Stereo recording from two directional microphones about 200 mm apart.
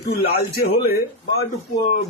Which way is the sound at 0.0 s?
50° left (ahead or behind).